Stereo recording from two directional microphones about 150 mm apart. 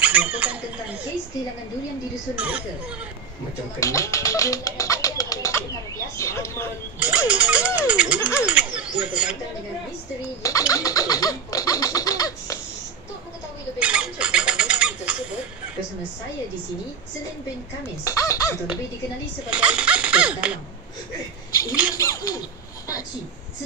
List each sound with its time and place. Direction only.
0.0 s a sound: 10° right (ahead or behind)
2.3 s music: 10° right (ahead or behind)
3.8 s speech: 20° left (ahead or behind)
7.0 s music: 10° right (ahead or behind)
8.4 s bird: 10° right (ahead or behind)
9.0 s music: 10° right (ahead or behind)
10.7 s bird: 25° left (ahead or behind)
13.7 s bird: 10° right (ahead or behind)
18.0 s speech: 20° left (ahead or behind)
19.5 s music: 5° right (ahead or behind)
21.9 s speech: 20° left (ahead or behind)